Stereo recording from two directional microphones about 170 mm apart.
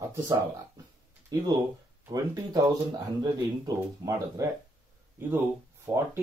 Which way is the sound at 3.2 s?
20° right (ahead or behind).